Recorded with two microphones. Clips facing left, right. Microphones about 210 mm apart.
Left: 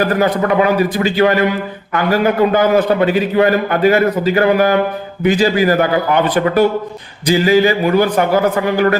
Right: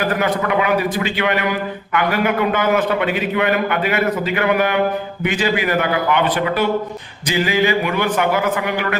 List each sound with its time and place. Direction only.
0.2 s a man's voice: 40° left (ahead or behind)